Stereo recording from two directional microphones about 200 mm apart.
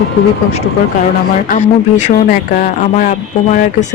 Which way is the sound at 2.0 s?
40° left (ahead or behind).